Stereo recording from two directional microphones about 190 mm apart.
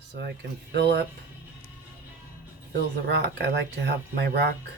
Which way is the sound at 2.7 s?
60° right (ahead or behind).